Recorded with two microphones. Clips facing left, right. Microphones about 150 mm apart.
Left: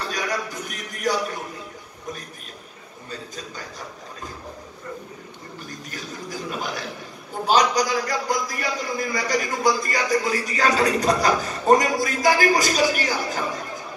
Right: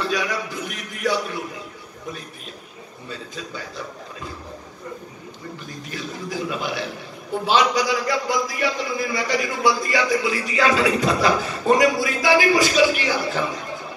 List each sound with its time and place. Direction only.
0.0 s a man's voice: 45° left (ahead or behind)
5.9 s a man's voice: 45° left (ahead or behind)